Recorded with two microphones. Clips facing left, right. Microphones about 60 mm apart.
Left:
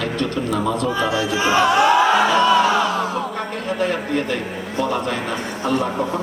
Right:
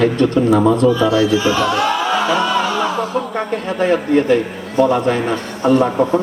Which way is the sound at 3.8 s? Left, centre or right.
Right.